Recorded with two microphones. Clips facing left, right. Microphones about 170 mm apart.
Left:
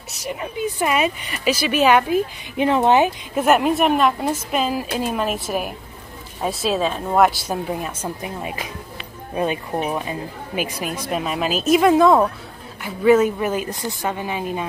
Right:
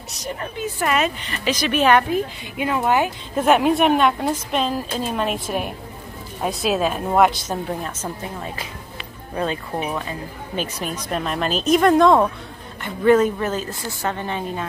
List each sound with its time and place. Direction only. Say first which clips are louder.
0.3 s speech: left 2 dB; 10° left (ahead or behind)
2.5 s speech: left 4 dB; 30° left (ahead or behind)
3.3 s a woman's voice: right 1 dB; centre (ahead or behind)